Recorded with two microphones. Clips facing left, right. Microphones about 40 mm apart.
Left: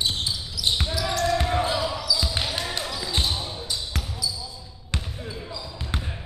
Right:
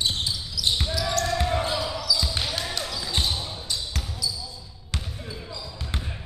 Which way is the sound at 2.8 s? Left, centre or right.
Centre.